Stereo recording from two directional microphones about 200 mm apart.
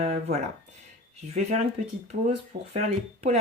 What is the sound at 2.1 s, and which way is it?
Speech, 40° right (ahead or behind).